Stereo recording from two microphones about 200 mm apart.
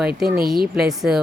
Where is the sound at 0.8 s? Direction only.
Centre (ahead or behind).